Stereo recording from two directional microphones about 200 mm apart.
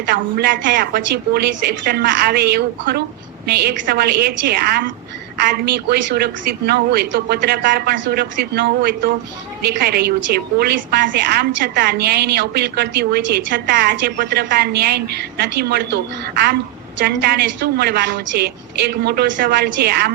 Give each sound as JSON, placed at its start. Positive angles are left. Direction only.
{"t": 0.1, "sound": "a woman's voice", "side_deg": -50}
{"t": 17.2, "sound": "a woman's voice", "side_deg": -50}